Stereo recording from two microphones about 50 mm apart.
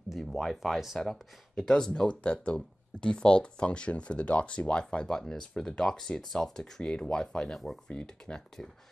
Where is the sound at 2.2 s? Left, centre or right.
Left.